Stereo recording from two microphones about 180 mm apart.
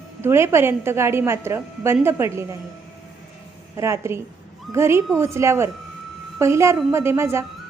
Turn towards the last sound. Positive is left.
turn(degrees=-15)  # may be behind; listen again after turning